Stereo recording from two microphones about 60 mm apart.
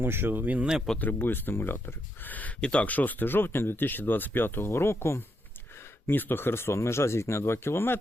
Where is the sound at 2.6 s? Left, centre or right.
Centre; by 5.2 s left.